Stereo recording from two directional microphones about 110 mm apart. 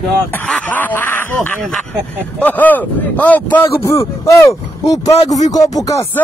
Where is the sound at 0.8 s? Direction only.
15° left (ahead or behind).